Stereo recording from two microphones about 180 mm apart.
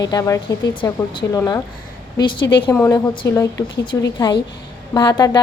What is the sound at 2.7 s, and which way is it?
A woman's voice, 15° left (ahead or behind).